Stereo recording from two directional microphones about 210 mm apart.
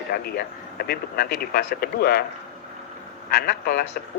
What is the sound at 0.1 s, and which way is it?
Speech, 45° left (ahead or behind).